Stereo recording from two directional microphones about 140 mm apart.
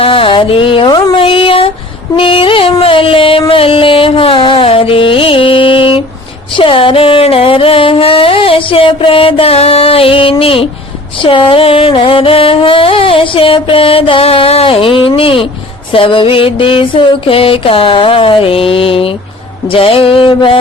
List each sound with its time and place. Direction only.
0.0 s music: 40° left (ahead or behind)
1.2 s a sound: 40° left (ahead or behind)
2.1 s music: 40° left (ahead or behind)